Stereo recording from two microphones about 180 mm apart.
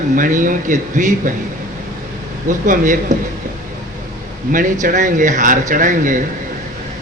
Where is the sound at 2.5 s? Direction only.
45° right (ahead or behind).